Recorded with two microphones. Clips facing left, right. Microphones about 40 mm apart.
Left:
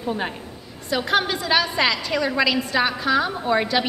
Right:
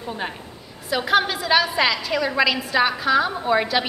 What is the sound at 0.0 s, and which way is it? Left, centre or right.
A woman's voice, centre.